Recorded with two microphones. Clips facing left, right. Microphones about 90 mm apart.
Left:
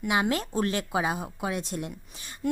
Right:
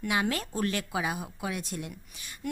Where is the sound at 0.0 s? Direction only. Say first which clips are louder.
Left 3 dB; 25° left (ahead or behind).